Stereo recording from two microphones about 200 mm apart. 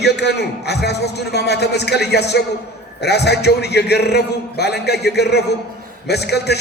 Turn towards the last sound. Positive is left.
turn(degrees=55)  # may be behind; listen again after turning